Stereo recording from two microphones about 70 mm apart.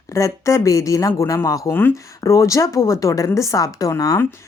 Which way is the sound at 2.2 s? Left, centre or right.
Left.